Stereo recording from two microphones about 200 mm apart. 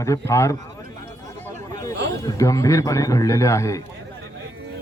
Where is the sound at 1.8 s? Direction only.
15° left (ahead or behind).